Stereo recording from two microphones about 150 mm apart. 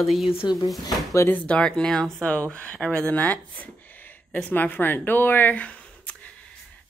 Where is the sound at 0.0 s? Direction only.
Centre (ahead or behind).